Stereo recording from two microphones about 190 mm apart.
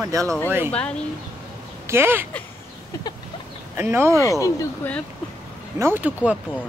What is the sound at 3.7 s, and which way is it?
Speech, 10° right (ahead or behind).